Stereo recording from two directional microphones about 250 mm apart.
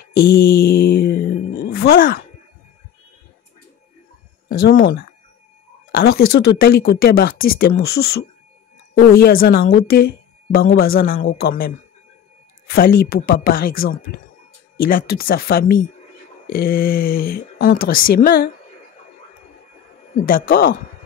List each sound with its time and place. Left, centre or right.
0.2 s mantra: left
4.5 s speech: left
12.7 s speech: left
20.2 s speech: left